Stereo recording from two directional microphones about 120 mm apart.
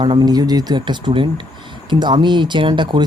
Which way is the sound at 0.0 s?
35° right (ahead or behind).